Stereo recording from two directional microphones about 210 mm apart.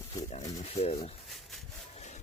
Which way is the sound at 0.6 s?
30° left (ahead or behind).